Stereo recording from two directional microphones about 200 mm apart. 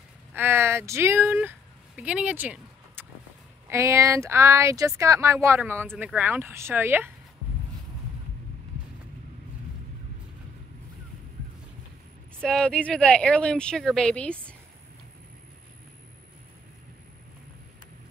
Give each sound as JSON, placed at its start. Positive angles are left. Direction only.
{"t": 0.3, "sound": "speech", "side_deg": -10}
{"t": 12.4, "sound": "speech", "side_deg": 5}